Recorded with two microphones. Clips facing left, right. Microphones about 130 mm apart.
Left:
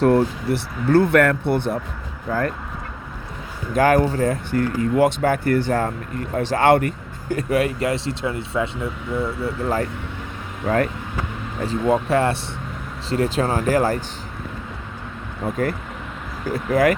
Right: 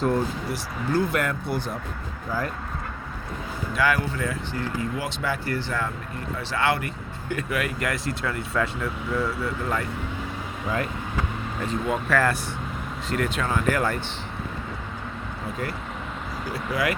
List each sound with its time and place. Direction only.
0.0 s speech: 65° left (ahead or behind)
3.8 s speech: 45° left (ahead or behind)
4.5 s speech: 55° left (ahead or behind); by 9.8 s 30° left (ahead or behind)
10.7 s speech: 75° left (ahead or behind)
11.6 s speech: 35° left (ahead or behind)
15.4 s speech: 50° left (ahead or behind)